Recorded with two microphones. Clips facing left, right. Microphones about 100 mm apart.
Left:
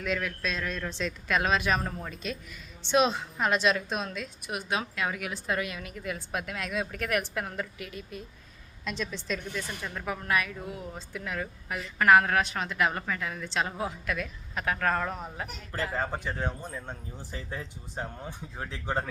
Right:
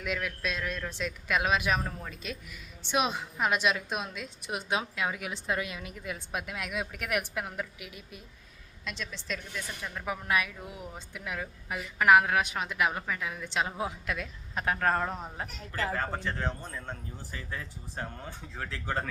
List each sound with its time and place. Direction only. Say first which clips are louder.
0.0 s a man's voice: left 2 dB; 10° right (ahead or behind)
8.8 s speech: left 5 dB; centre (ahead or behind)
10.1 s a man's voice: left 1 dB; 15° right (ahead or behind)
16.0 s speech: left 1 dB; 15° left (ahead or behind)
17.3 s speech: left 2 dB; 25° left (ahead or behind)